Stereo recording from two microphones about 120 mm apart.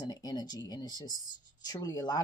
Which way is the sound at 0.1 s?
35° left (ahead or behind).